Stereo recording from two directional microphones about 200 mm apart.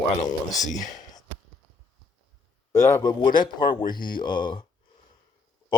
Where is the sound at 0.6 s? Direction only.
40° left (ahead or behind).